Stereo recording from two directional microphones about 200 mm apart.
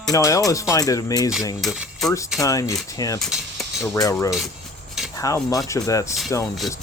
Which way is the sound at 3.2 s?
Centre (ahead or behind).